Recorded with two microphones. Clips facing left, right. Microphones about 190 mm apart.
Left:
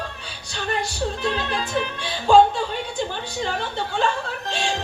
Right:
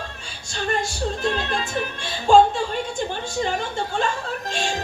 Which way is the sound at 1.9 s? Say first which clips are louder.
Right 2 dB; 45° right (ahead or behind).